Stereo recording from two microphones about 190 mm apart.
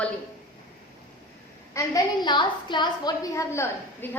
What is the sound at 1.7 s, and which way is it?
A woman's voice, 15° left (ahead or behind).